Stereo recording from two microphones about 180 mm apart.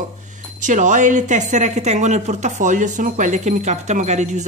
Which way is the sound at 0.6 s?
45° right (ahead or behind).